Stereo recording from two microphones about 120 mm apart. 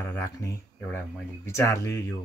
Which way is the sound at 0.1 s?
20° left (ahead or behind).